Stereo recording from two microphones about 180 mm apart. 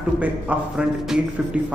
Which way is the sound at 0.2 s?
5° right (ahead or behind).